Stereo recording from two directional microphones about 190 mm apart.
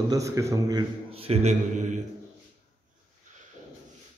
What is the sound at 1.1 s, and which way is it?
Speech, 30° right (ahead or behind).